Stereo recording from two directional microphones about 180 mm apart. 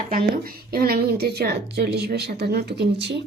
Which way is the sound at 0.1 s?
55° right (ahead or behind).